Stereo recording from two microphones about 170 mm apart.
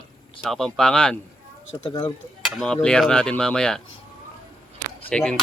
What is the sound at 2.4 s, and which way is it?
Speech, centre (ahead or behind).